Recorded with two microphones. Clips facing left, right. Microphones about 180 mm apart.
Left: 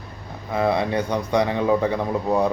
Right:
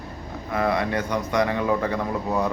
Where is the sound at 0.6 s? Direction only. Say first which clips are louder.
Left 2 dB; 25° left (ahead or behind).